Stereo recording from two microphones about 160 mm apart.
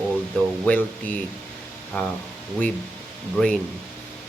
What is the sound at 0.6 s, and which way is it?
Speech, 10° left (ahead or behind).